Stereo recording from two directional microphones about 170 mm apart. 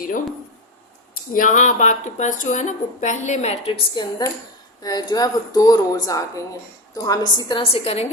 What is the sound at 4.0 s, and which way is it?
A woman's voice, 25° left (ahead or behind).